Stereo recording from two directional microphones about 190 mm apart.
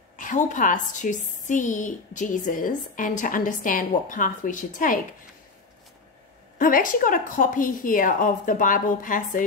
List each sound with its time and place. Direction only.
0.2 s a woman's voice: 40° left (ahead or behind)
6.6 s a woman's voice: 45° left (ahead or behind)